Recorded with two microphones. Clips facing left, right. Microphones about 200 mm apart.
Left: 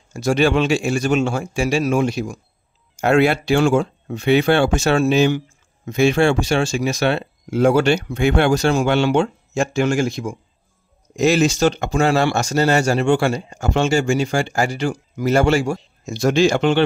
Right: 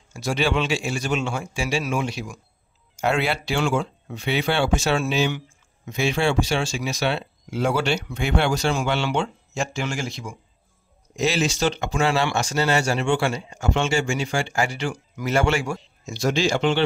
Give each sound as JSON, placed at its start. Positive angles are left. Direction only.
{"t": 0.1, "sound": "speech", "side_deg": 45}
{"t": 16.1, "sound": "speech", "side_deg": 50}